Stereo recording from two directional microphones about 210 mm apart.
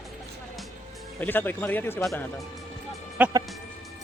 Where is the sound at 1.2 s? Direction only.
10° left (ahead or behind).